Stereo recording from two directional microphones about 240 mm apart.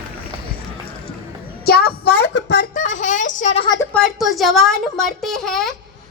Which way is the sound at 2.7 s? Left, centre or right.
Left.